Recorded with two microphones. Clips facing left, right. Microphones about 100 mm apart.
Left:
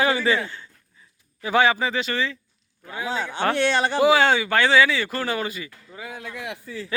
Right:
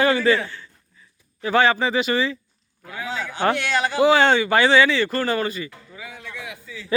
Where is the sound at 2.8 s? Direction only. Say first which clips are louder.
Left 2 dB; 25° left (ahead or behind).